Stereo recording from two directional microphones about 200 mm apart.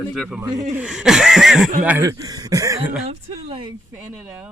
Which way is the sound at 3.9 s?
5° right (ahead or behind).